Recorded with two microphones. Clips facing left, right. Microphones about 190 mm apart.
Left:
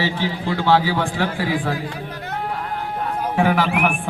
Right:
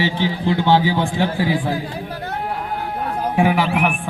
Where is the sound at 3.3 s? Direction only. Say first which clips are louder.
Right 1 dB; 10° right (ahead or behind).